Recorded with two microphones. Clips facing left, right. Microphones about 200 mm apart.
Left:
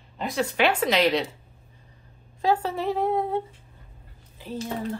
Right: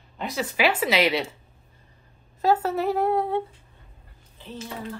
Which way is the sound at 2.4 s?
5° right (ahead or behind).